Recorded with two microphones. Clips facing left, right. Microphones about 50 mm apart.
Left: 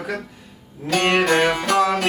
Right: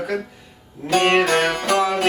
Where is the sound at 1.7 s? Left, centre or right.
Centre.